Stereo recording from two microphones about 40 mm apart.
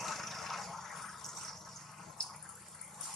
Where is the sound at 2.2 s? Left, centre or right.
Left.